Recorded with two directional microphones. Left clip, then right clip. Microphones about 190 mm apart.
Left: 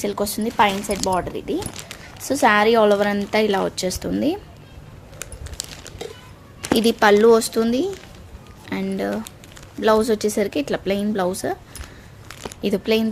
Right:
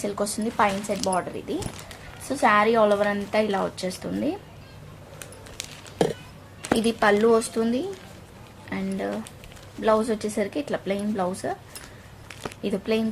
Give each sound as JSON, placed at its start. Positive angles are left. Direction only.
{"t": 0.0, "sound": "speech", "side_deg": 30}
{"t": 6.7, "sound": "speech", "side_deg": 40}
{"t": 12.3, "sound": "a sound", "side_deg": 45}
{"t": 12.6, "sound": "speech", "side_deg": 45}